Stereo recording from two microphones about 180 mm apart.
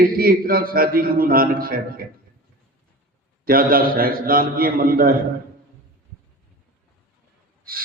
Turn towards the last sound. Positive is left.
turn(degrees=-55)  # may be behind; listen again after turning